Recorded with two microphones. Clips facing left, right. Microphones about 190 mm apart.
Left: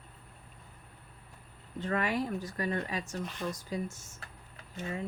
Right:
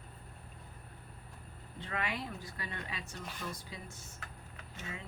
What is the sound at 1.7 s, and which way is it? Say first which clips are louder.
Speech: left 8 dB; 45° left (ahead or behind).